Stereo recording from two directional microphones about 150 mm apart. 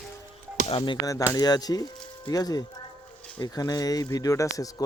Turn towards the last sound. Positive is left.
turn(degrees=20)  # may be behind; listen again after turning